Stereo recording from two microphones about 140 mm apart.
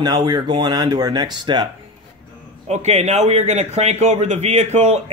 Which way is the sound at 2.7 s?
50° right (ahead or behind).